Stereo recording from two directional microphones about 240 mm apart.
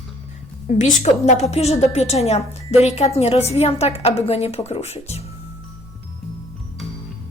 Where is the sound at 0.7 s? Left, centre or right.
Left.